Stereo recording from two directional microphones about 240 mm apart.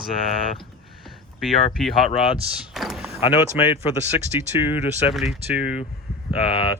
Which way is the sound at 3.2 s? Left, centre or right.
Left.